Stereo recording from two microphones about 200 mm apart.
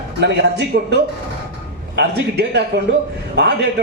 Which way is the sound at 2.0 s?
55° right (ahead or behind).